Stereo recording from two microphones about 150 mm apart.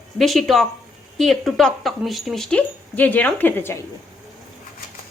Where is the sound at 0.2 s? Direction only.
Centre (ahead or behind).